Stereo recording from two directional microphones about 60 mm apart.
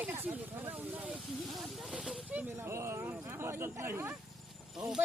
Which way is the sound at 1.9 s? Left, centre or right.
Centre.